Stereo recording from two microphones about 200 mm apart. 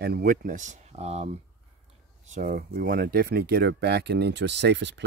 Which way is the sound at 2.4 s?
50° right (ahead or behind).